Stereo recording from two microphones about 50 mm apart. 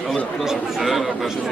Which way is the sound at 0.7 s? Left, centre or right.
Centre.